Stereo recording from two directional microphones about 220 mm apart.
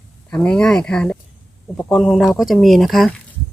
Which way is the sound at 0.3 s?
5° left (ahead or behind).